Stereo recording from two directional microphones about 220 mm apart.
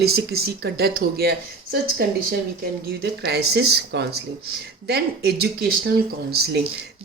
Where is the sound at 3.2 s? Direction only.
45° right (ahead or behind).